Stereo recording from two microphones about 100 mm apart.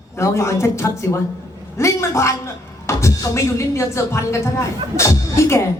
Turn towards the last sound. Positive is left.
turn(degrees=30)  # may be behind; listen again after turning